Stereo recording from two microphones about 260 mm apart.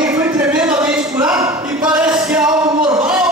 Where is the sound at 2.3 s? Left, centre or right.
Centre.